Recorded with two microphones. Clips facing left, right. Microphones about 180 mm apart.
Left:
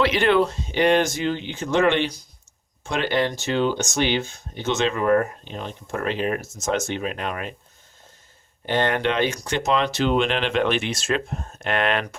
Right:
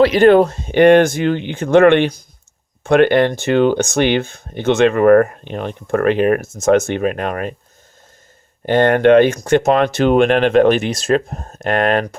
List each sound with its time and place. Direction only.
0.0 s speech: 40° right (ahead or behind)
8.6 s speech: 50° right (ahead or behind)